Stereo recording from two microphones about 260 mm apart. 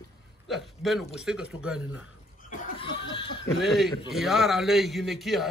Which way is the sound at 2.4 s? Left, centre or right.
Left.